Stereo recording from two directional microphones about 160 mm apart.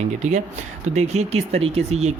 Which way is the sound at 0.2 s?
45° right (ahead or behind).